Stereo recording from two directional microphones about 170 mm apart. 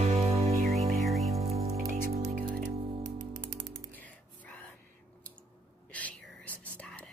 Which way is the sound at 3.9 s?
10° left (ahead or behind).